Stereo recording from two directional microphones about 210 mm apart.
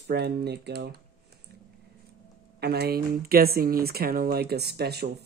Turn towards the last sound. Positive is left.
turn(degrees=-50)  # may be behind; listen again after turning